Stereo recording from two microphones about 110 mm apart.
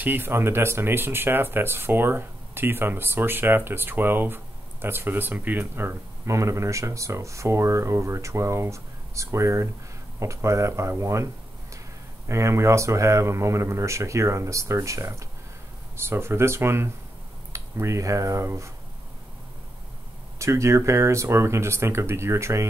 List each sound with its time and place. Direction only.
0.0 s speech: 20° right (ahead or behind)
12.3 s speech: 25° right (ahead or behind)
20.3 s speech: 25° right (ahead or behind)